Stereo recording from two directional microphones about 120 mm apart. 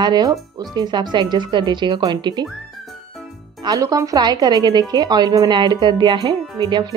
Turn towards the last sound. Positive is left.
turn(degrees=-35)  # may be behind; listen again after turning